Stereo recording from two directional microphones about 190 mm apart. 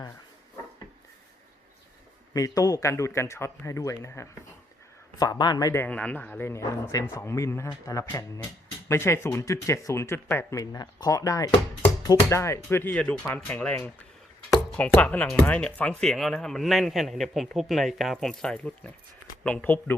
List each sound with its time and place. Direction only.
2.3 s speech: 20° left (ahead or behind)